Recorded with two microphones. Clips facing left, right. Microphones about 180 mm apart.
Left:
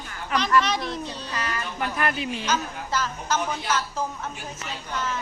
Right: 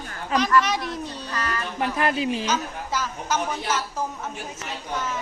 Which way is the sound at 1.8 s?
25° right (ahead or behind).